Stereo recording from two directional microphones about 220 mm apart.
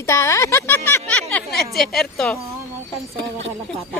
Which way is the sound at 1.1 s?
5° left (ahead or behind).